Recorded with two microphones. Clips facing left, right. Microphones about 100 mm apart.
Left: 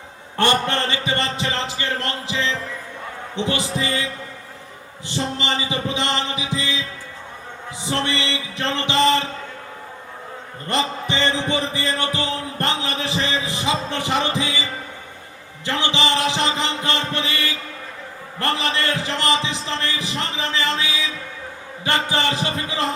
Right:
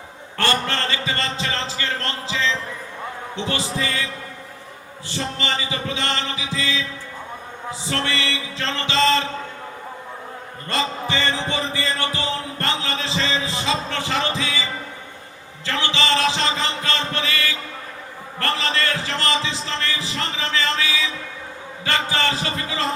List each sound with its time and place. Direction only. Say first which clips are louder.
0.3 s a man's voice: left 3 dB; 20° left (ahead or behind)
3.3 s music: left 3 dB; 20° left (ahead or behind)
7.9 s music: left 2 dB; 20° left (ahead or behind)
10.7 s music: left 1 dB; 20° left (ahead or behind)
18.3 s a sound: left 1 dB; 20° left (ahead or behind)
21.8 s music: left 1 dB; 20° left (ahead or behind)